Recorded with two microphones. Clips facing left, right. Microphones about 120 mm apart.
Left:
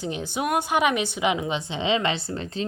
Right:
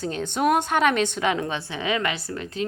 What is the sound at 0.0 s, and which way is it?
A woman's voice, 10° left (ahead or behind).